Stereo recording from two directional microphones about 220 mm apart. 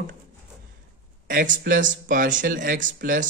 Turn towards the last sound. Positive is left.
turn(degrees=-35)  # may be behind; listen again after turning